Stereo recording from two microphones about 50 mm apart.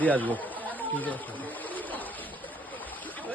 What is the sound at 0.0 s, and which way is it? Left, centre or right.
Speech, left.